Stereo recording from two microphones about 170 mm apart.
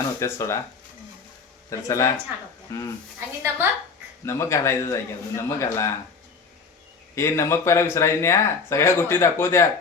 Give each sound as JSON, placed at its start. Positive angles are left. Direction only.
{"t": 0.2, "sound": "speech", "side_deg": 15}
{"t": 1.7, "sound": "speech", "side_deg": 15}
{"t": 3.2, "sound": "a woman's voice", "side_deg": -10}
{"t": 4.3, "sound": "speech", "side_deg": 15}
{"t": 7.2, "sound": "speech", "side_deg": 15}